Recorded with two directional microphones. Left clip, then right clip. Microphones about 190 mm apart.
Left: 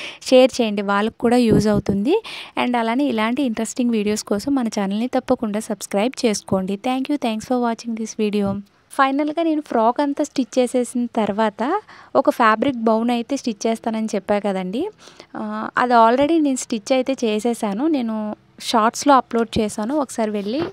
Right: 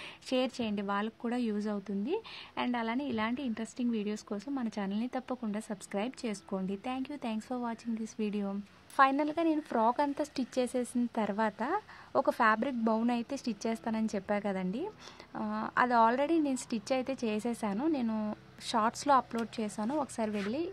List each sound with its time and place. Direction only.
0.3 s a woman's voice: 60° left (ahead or behind)
8.9 s a woman's voice: 40° left (ahead or behind)